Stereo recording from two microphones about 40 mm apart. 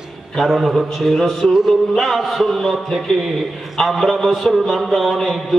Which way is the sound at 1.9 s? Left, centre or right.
Centre.